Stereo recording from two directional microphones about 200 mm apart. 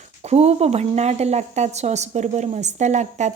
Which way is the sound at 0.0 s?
30° right (ahead or behind).